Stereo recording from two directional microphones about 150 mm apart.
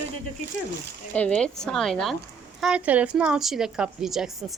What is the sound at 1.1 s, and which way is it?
A woman's voice, 10° left (ahead or behind).